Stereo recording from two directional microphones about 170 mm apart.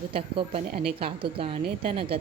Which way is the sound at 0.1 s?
30° right (ahead or behind).